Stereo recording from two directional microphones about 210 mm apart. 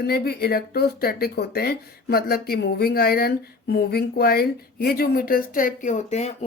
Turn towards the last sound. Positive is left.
turn(degrees=30)  # may be behind; listen again after turning